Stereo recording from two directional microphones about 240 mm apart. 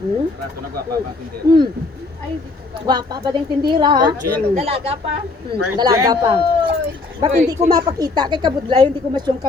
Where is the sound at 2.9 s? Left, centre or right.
Centre.